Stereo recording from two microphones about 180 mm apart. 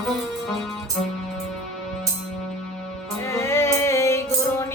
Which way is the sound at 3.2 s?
15° left (ahead or behind).